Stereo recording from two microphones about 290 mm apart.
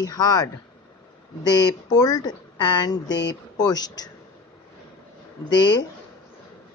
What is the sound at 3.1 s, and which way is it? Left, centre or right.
Speech, left.